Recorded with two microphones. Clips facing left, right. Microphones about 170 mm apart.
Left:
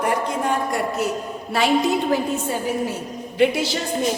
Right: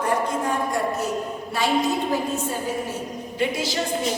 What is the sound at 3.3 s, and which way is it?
Speech, 70° left (ahead or behind).